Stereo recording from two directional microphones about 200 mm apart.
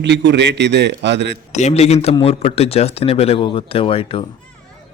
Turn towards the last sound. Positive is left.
turn(degrees=25)  # may be behind; listen again after turning